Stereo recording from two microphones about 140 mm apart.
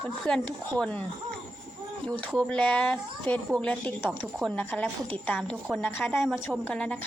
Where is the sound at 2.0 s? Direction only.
5° left (ahead or behind).